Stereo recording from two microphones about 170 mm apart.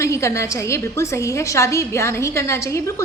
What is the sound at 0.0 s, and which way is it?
A woman's voice, 15° left (ahead or behind).